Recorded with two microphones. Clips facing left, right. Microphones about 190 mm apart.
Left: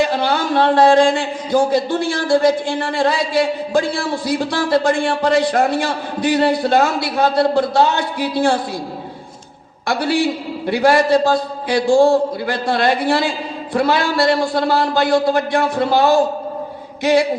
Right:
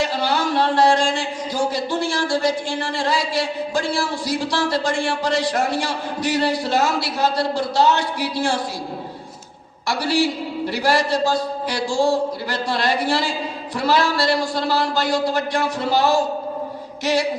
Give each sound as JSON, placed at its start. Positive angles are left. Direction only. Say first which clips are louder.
{"t": 0.0, "sound": "a man's voice", "louder": "left 4 dB", "side_deg": 55}
{"t": 9.8, "sound": "a man's voice", "louder": "left 3 dB", "side_deg": 55}